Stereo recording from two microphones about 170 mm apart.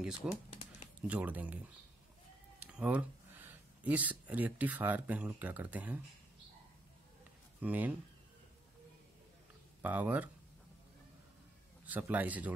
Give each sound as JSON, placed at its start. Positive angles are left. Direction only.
{"t": 0.0, "sound": "speech", "side_deg": -5}
{"t": 0.5, "sound": "a sound", "side_deg": 40}
{"t": 1.0, "sound": "speech", "side_deg": -10}
{"t": 2.6, "sound": "speech", "side_deg": -10}
{"t": 7.6, "sound": "speech", "side_deg": -10}
{"t": 9.8, "sound": "speech", "side_deg": -10}
{"t": 11.8, "sound": "speech", "side_deg": -10}